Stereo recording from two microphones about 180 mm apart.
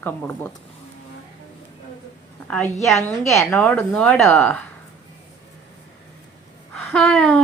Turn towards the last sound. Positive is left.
turn(degrees=5)  # may be behind; listen again after turning